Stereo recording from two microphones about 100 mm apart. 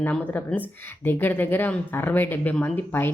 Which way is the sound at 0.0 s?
15° left (ahead or behind).